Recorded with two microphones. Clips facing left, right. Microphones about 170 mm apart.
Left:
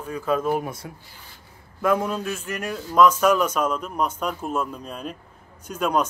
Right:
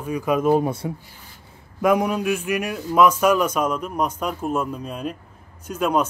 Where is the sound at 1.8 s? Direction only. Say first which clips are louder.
Right 3 dB; 15° right (ahead or behind).